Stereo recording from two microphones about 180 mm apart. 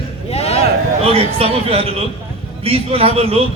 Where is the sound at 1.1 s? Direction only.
35° right (ahead or behind).